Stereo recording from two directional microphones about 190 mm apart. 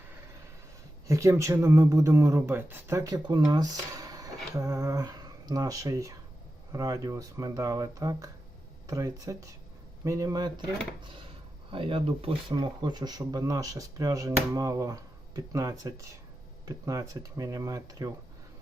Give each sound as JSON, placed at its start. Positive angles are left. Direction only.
{"t": 1.0, "sound": "speech", "side_deg": -15}